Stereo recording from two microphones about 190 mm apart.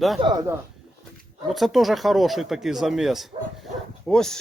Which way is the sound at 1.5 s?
Centre (ahead or behind).